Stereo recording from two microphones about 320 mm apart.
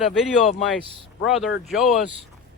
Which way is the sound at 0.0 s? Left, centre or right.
Centre.